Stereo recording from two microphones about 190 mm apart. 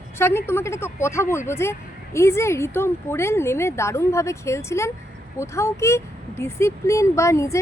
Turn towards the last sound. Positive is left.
turn(degrees=15)  # may be behind; listen again after turning